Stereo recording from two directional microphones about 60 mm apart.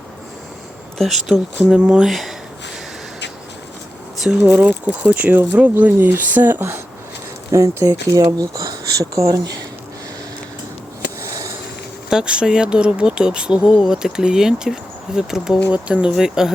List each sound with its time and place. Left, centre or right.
0.9 s speech: centre
4.2 s speech: centre
4.4 s speech: right
7.5 s speech: right
11.2 s a sound: right
12.1 s speech: centre
15.7 s speech: centre